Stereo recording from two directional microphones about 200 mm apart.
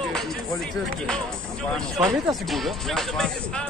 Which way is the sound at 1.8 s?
Centre (ahead or behind).